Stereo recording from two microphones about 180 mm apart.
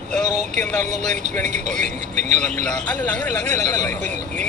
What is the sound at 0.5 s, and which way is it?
Speech, 40° right (ahead or behind).